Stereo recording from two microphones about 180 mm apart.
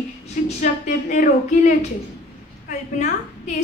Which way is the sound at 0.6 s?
45° left (ahead or behind).